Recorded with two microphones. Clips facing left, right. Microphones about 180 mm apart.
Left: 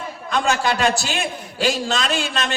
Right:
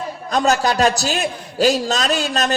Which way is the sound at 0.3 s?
40° right (ahead or behind).